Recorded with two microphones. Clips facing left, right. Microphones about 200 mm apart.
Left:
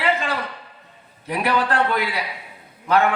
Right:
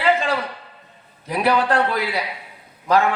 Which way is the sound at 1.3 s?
35° right (ahead or behind).